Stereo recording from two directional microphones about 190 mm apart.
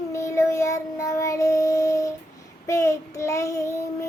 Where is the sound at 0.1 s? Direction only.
15° left (ahead or behind).